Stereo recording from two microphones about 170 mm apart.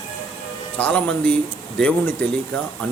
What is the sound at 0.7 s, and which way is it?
Speech, 5° left (ahead or behind).